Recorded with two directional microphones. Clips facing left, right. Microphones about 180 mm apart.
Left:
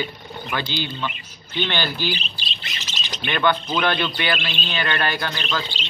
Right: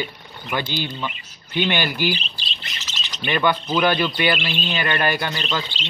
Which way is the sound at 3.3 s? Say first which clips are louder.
Right 1 dB; 10° right (ahead or behind).